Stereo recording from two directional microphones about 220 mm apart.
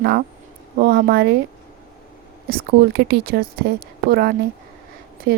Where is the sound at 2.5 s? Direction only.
45° right (ahead or behind).